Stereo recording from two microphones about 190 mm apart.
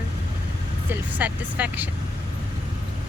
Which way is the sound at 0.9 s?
10° right (ahead or behind).